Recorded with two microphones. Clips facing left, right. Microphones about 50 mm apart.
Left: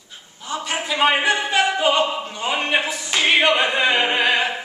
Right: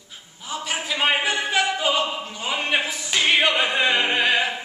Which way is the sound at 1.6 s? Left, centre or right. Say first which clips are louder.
Left 4 dB; left.